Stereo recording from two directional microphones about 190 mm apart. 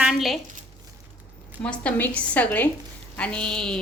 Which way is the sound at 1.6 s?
5° left (ahead or behind).